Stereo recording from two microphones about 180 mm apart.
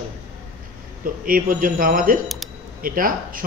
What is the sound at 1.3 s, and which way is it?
Speech, 50° right (ahead or behind).